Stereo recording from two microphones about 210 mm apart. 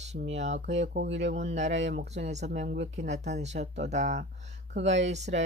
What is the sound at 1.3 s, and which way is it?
Speech, 35° right (ahead or behind).